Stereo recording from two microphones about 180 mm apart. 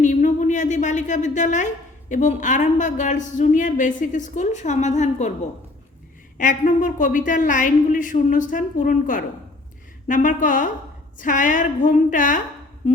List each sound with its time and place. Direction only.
0.0 s a woman's voice: 45° left (ahead or behind)
6.3 s a woman's voice: 45° left (ahead or behind)